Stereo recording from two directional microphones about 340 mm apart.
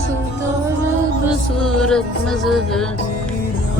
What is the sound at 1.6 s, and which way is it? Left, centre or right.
Music, centre.